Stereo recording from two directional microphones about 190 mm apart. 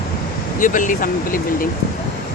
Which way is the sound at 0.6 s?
45° left (ahead or behind).